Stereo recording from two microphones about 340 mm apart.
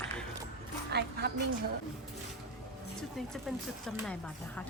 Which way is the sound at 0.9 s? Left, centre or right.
Right.